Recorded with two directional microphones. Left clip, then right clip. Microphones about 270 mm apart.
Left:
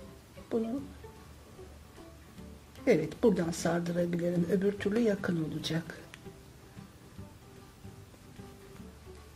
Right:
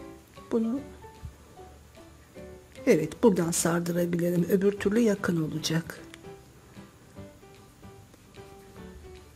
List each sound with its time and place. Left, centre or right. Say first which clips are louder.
0.5 s speech: right 4 dB; right
2.8 s speech: right 4 dB; right